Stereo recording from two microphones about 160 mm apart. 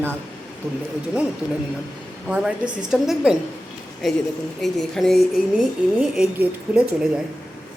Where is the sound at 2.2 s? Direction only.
5° right (ahead or behind).